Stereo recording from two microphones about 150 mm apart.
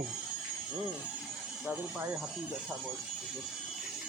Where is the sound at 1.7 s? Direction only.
10° right (ahead or behind).